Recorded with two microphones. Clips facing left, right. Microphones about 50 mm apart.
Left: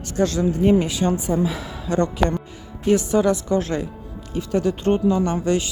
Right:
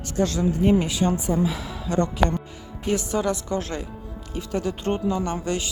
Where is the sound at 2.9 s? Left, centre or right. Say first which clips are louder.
Left 5 dB; left.